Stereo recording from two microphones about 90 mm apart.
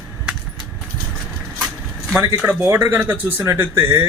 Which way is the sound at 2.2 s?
25° right (ahead or behind).